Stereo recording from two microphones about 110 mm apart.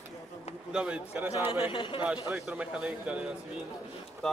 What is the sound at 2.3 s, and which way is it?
Speech, 10° right (ahead or behind).